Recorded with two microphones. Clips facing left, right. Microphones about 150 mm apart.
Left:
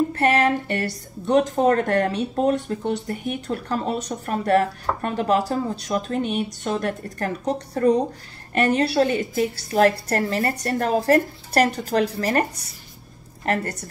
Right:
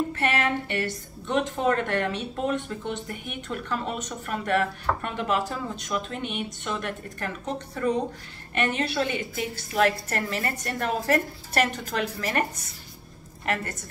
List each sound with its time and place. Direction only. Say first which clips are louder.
0.1 s a woman's voice: left 6 dB; 40° left (ahead or behind)
13.5 s a woman's voice: left 5 dB; 35° left (ahead or behind)